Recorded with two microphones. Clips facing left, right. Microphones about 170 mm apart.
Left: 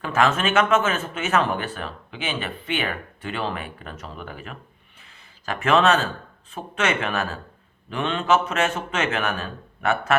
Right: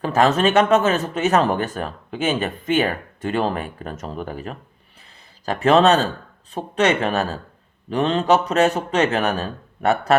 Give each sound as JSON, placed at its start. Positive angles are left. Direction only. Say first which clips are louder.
{"t": 0.0, "sound": "speech", "louder": "right 5 dB", "side_deg": -35}